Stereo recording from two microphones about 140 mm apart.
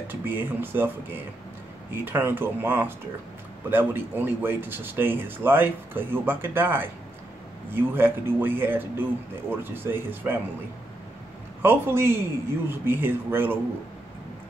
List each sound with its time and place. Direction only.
0.1 s speech: 15° right (ahead or behind)
11.6 s speech: 15° right (ahead or behind)